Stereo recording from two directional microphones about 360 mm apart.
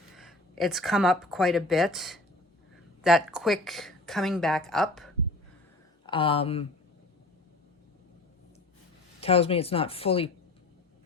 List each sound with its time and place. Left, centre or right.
0.2 s speech: centre
6.1 s speech: centre
9.2 s speech: centre